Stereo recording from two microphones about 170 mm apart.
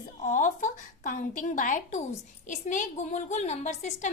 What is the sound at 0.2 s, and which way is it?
A woman's voice, 45° left (ahead or behind).